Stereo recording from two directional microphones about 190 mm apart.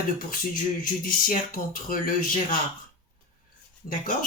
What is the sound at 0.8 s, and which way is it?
Speech, 45° left (ahead or behind).